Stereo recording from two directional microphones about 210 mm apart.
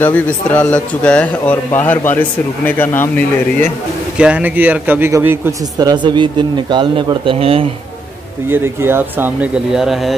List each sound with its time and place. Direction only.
0.0 s speech: 5° left (ahead or behind)
4.2 s a man's voice: 5° right (ahead or behind); by 7.7 s 25° right (ahead or behind)
8.5 s speech: 10° right (ahead or behind)